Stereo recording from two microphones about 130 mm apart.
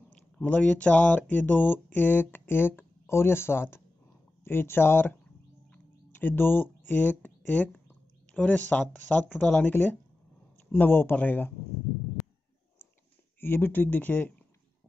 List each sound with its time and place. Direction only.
0.1 s speech: 10° left (ahead or behind)
5.7 s a sound: 15° left (ahead or behind)
9.1 s speech: 10° left (ahead or behind)
13.4 s speech: 15° left (ahead or behind)